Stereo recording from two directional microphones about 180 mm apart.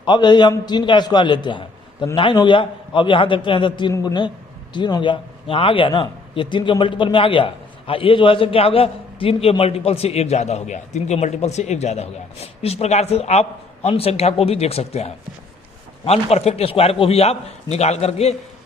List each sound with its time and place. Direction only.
0.0 s a man's voice: 25° left (ahead or behind)